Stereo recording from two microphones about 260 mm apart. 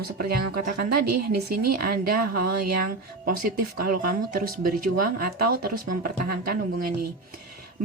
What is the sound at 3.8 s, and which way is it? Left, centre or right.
Speech, right.